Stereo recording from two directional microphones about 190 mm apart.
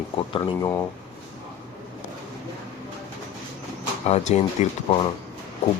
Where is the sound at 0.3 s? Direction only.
25° left (ahead or behind).